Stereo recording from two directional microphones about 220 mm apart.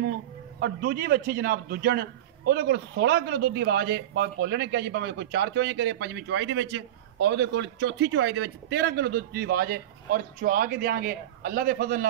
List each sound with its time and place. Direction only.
0.6 s a man's voice: 45° right (ahead or behind)